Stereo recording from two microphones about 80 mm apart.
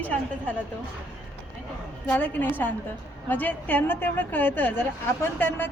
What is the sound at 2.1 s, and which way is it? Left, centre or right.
A woman's voice, left.